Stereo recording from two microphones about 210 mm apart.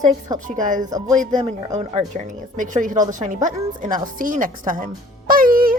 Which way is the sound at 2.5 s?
35° right (ahead or behind).